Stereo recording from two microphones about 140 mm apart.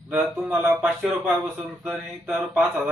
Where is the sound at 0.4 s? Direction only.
15° right (ahead or behind).